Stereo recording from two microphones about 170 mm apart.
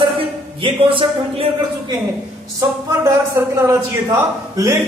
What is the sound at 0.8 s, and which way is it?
Music, 30° right (ahead or behind).